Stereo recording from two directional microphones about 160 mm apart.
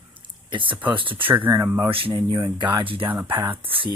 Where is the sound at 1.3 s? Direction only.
10° right (ahead or behind).